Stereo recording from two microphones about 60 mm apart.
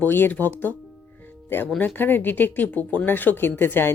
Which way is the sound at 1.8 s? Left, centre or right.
Left.